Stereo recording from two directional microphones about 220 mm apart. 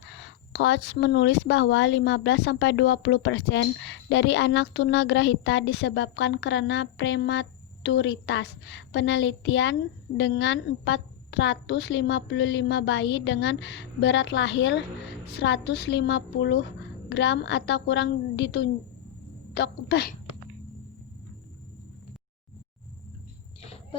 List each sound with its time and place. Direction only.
0.1 s speech: 55° left (ahead or behind)